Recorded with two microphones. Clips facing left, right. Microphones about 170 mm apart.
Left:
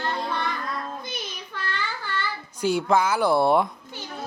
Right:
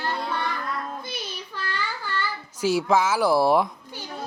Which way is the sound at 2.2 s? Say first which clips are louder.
Even; 5° right (ahead or behind).